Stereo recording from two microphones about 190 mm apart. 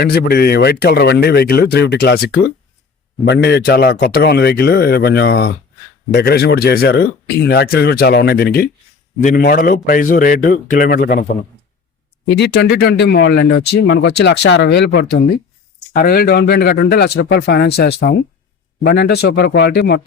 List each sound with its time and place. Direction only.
0.0 s a man's voice: 55° left (ahead or behind)
12.4 s speech: 60° left (ahead or behind)